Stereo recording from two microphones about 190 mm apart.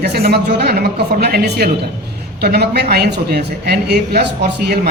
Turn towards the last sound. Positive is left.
turn(degrees=-60)  # may be behind; listen again after turning